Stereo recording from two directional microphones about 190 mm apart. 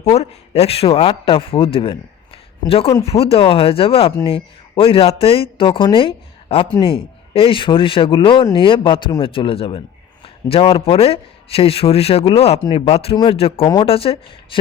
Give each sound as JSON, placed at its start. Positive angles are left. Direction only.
{"t": 0.0, "sound": "a man's voice", "side_deg": 35}